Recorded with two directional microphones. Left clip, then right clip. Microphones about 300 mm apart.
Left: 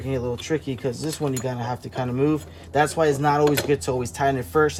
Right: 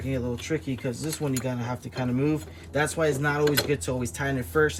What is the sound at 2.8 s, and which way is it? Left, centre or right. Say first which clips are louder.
Speech: left 5 dB; centre.